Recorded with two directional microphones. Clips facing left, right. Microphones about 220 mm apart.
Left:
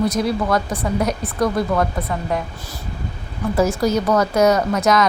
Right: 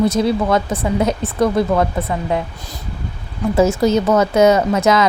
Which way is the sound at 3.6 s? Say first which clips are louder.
Right 4 dB; 25° right (ahead or behind).